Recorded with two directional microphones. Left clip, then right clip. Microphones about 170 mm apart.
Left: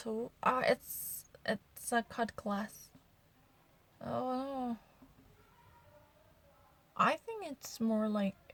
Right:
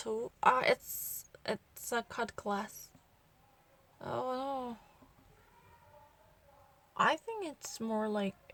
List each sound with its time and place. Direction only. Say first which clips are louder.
0.0 s a woman's voice: right 4 dB; 25° right (ahead or behind)
1.4 s a sound: left 1 dB; 20° right (ahead or behind)
1.9 s a woman's voice: left 1 dB; 25° right (ahead or behind)
4.0 s a woman's voice: right 1 dB; 20° right (ahead or behind)
7.0 s a woman's voice: right 1 dB; 20° right (ahead or behind)